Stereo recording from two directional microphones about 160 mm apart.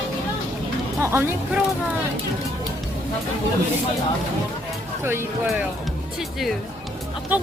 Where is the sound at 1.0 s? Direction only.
15° right (ahead or behind).